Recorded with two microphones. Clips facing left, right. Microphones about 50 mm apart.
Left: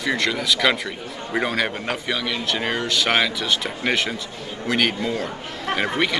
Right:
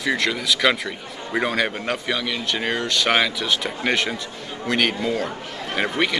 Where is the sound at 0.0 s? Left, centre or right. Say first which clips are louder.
Even; centre.